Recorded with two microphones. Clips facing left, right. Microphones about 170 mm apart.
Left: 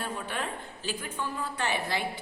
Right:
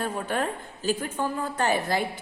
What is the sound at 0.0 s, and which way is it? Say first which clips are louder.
A woman's voice: right 6 dB; 45° right (ahead or behind).